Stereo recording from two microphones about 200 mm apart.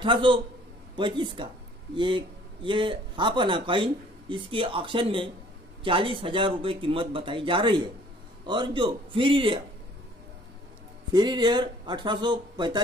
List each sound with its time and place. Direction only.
0.0 s speech: 25° right (ahead or behind)
11.1 s speech: 20° right (ahead or behind)